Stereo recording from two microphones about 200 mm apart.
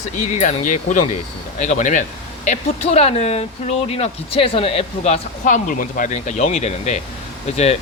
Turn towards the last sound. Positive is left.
turn(degrees=30)  # may be behind; listen again after turning